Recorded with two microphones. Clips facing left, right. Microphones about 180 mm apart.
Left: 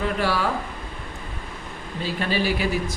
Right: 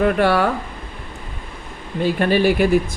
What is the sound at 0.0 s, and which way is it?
Speech, 60° right (ahead or behind).